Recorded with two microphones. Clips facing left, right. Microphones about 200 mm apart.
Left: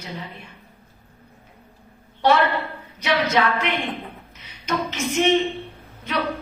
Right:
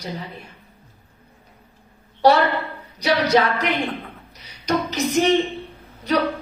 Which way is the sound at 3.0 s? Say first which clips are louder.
Right 3 dB; 40° right (ahead or behind).